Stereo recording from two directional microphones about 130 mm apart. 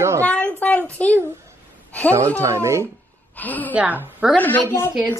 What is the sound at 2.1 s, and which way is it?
Speech, 20° right (ahead or behind).